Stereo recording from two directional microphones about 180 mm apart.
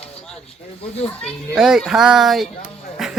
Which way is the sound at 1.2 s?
Centre (ahead or behind).